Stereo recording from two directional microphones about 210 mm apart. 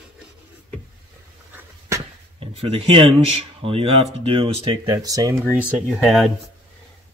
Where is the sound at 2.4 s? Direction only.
30° right (ahead or behind); by 6.3 s centre (ahead or behind).